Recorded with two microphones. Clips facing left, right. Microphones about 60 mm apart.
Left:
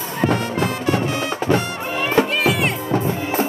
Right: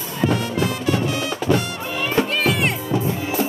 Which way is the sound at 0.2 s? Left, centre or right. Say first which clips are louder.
Left 1 dB; left.